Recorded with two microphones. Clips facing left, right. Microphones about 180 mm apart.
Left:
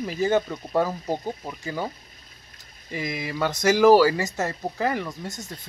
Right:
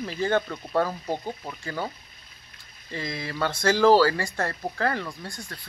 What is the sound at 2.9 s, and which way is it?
Speech, 15° left (ahead or behind).